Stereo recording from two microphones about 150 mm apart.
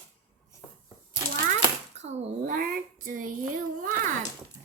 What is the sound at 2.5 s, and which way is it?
Speech, 70° right (ahead or behind).